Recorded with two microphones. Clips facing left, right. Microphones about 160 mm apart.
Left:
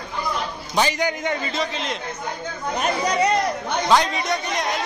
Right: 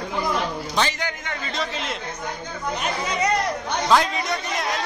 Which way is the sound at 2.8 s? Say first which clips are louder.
Left 6 dB; 40° left (ahead or behind).